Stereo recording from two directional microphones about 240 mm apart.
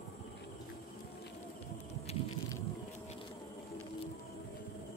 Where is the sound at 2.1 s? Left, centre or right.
Left.